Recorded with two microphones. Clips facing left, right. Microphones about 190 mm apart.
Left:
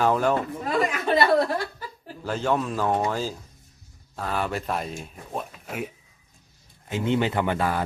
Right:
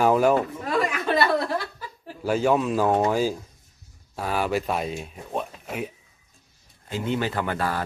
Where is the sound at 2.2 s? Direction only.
10° right (ahead or behind).